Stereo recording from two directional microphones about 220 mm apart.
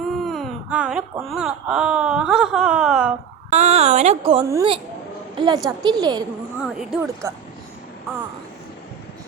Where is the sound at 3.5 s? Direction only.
30° right (ahead or behind).